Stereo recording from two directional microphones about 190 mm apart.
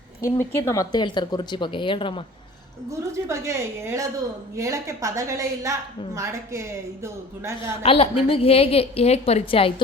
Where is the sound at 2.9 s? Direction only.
15° right (ahead or behind).